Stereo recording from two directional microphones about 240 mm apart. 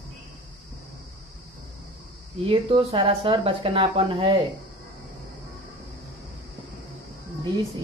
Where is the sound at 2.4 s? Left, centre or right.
Right.